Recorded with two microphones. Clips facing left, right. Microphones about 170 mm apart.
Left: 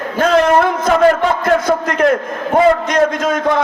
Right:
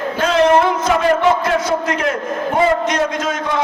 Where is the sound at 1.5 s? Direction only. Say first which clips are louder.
Left 3 dB; 50° left (ahead or behind).